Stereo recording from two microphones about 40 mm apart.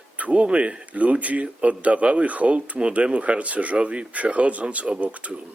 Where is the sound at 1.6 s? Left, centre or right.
Right.